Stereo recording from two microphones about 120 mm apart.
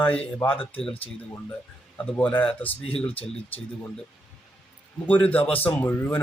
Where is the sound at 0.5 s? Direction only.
50° left (ahead or behind).